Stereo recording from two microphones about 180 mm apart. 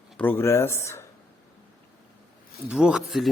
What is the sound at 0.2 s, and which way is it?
Speech, 10° left (ahead or behind).